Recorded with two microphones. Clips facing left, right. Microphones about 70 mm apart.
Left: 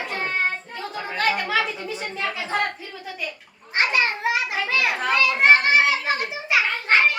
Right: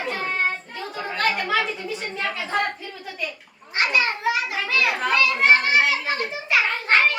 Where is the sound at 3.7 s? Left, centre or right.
Left.